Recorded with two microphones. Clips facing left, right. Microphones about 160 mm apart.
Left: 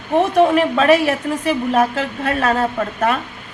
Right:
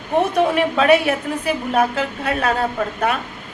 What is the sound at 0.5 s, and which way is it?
A woman's voice, 40° left (ahead or behind).